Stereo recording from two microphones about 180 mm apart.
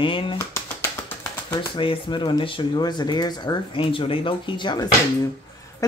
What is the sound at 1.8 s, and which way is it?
Speech, 25° left (ahead or behind).